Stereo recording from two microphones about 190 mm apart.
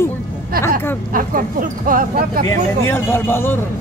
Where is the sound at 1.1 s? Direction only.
45° right (ahead or behind).